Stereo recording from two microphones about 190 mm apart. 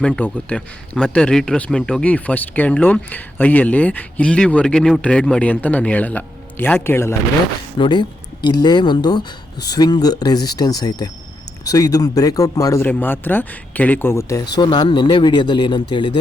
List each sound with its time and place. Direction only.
0.0 s speech: 10° left (ahead or behind)
7.8 s speech: 25° left (ahead or behind)